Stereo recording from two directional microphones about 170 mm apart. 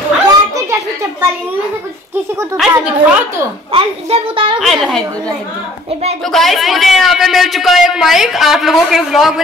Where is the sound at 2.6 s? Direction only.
Centre (ahead or behind).